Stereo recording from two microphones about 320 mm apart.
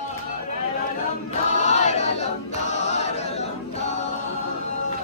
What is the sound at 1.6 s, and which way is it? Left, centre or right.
Choir, left.